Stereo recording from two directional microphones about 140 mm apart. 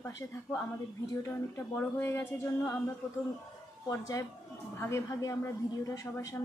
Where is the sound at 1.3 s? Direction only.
15° left (ahead or behind).